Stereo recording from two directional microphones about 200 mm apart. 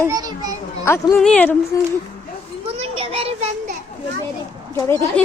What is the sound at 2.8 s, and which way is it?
Children playing, 30° right (ahead or behind).